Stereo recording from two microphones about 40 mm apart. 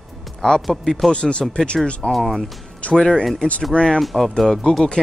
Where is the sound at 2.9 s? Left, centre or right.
Centre.